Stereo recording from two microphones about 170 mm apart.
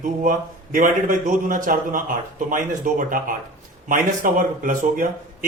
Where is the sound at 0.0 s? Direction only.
50° right (ahead or behind).